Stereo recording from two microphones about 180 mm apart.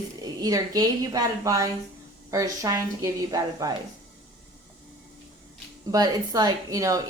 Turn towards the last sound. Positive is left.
turn(degrees=-20)  # may be behind; listen again after turning